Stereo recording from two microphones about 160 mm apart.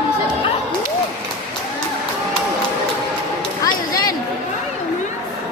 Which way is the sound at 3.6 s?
25° left (ahead or behind).